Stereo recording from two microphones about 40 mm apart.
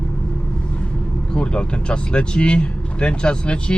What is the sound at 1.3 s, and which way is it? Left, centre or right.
Speech, left.